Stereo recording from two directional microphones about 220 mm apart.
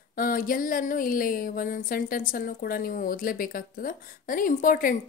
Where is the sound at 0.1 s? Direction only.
40° left (ahead or behind).